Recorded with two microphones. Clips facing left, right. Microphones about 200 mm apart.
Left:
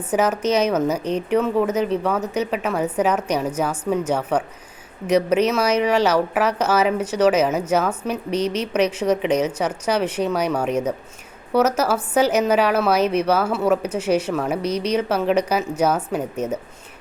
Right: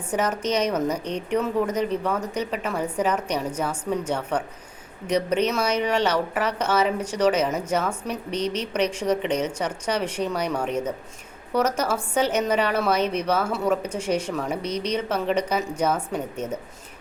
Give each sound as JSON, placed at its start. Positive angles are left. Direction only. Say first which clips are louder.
{"t": 0.1, "sound": "a woman's voice", "louder": "left 5 dB", "side_deg": 5}
{"t": 8.4, "sound": "speech", "louder": "left 3 dB", "side_deg": -30}
{"t": 8.9, "sound": "a woman's voice", "louder": "left 4 dB", "side_deg": 5}